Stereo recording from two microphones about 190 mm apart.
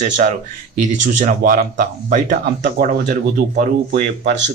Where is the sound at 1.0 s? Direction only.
40° right (ahead or behind).